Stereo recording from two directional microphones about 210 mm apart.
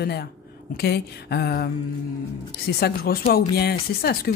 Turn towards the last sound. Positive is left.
turn(degrees=50)  # may be behind; listen again after turning